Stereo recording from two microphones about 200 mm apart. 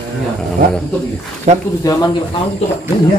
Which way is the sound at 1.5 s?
35° right (ahead or behind).